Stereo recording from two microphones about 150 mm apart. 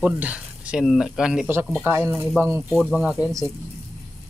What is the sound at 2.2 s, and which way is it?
Speech, 5° right (ahead or behind).